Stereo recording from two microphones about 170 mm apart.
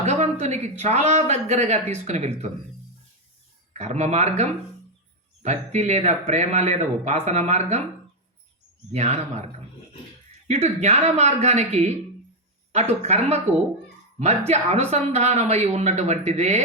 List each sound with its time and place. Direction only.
0.0 s speech: 40° right (ahead or behind)
3.7 s speech: 40° right (ahead or behind)
8.9 s speech: 40° right (ahead or behind)
10.5 s speech: 40° right (ahead or behind)